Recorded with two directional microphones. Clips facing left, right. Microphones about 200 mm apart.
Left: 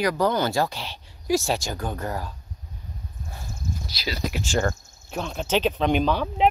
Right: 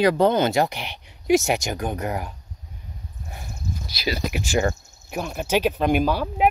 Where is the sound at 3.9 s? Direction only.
15° right (ahead or behind).